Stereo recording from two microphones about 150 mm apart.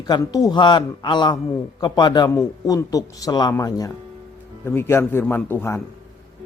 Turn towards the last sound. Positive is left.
turn(degrees=15)  # may be behind; listen again after turning